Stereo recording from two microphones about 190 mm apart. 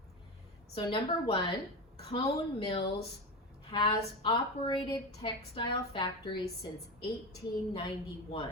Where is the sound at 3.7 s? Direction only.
25° left (ahead or behind).